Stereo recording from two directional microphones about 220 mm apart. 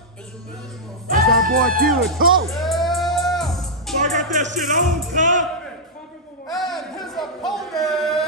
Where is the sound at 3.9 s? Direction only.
35° right (ahead or behind).